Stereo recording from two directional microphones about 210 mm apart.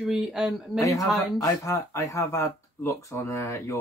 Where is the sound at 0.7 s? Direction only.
15° left (ahead or behind).